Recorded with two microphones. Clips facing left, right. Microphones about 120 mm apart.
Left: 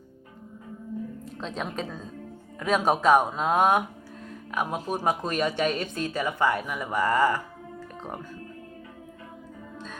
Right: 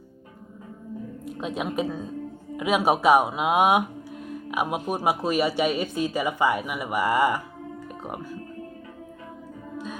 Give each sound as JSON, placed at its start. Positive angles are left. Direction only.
{"t": 1.2, "sound": "a woman's voice", "side_deg": -10}